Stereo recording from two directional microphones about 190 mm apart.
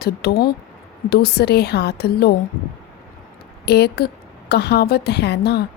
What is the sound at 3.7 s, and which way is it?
A woman's voice, 60° left (ahead or behind).